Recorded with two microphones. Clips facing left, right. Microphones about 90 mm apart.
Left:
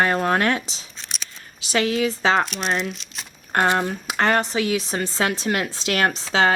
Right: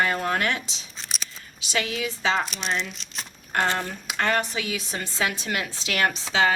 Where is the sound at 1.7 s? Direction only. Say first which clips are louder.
Left 7 dB; 40° left (ahead or behind).